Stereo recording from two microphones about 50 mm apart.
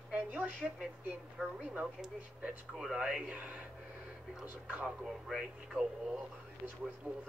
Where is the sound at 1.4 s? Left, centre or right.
Centre.